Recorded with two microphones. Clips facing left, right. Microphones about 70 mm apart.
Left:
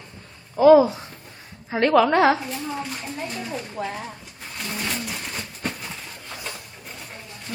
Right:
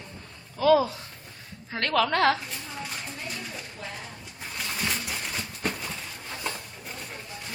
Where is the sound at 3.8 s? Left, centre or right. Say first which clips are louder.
Left 11 dB; left.